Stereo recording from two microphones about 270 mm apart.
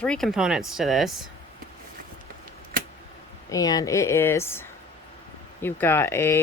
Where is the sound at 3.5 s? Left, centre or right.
Centre.